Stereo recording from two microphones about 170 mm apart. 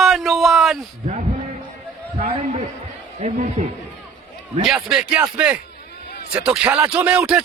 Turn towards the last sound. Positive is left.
turn(degrees=-10)  # may be behind; listen again after turning